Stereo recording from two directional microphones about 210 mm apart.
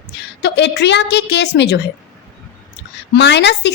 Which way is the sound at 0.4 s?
55° left (ahead or behind).